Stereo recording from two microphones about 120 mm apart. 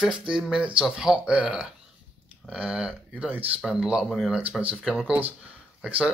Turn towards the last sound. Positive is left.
turn(degrees=-10)  # may be behind; listen again after turning